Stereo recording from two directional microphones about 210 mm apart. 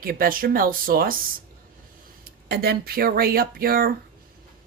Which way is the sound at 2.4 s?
50° right (ahead or behind).